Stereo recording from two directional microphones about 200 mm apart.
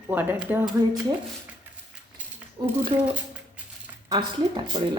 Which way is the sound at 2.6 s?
20° right (ahead or behind).